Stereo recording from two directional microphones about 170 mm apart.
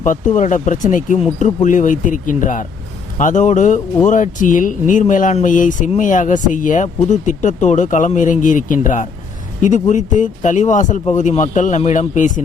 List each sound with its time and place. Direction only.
0.0 s speech: 50° left (ahead or behind)